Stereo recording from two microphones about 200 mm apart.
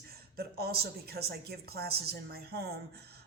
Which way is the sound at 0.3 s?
50° right (ahead or behind).